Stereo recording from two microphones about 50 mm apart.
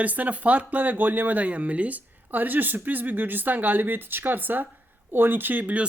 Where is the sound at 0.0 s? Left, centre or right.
Right.